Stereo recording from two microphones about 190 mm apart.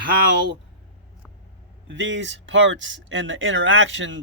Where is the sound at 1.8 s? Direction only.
75° right (ahead or behind).